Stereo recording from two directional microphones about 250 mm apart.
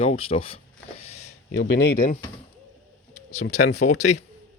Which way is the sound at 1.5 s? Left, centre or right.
Left.